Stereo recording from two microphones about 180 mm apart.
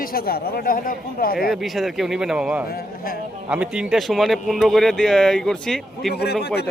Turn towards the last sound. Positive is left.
turn(degrees=65)  # may be behind; listen again after turning